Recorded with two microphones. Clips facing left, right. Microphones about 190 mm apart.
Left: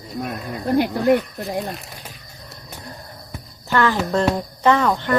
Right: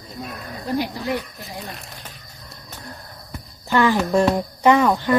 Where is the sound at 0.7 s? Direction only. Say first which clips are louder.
Left 7 dB; 55° left (ahead or behind).